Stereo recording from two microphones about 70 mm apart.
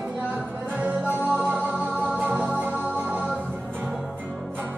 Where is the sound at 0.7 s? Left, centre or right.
Centre.